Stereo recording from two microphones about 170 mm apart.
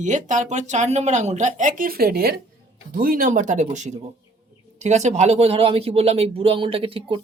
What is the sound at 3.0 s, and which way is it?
Speech, 55° right (ahead or behind).